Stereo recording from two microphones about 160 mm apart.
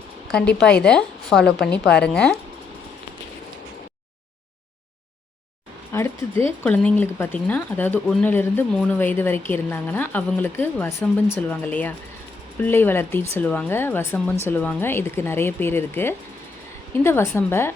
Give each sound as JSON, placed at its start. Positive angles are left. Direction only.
{"t": 0.3, "sound": "a woman's voice", "side_deg": 5}
{"t": 5.9, "sound": "speech", "side_deg": 15}